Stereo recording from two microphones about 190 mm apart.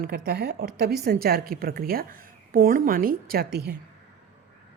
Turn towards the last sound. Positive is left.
turn(degrees=-60)  # may be behind; listen again after turning